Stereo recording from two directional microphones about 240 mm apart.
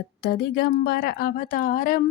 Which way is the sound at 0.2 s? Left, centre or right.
Left.